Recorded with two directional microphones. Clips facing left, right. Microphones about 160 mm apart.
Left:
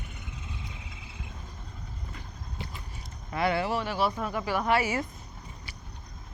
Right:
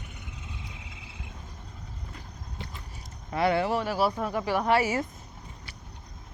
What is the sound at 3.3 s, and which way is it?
Speech, 40° right (ahead or behind).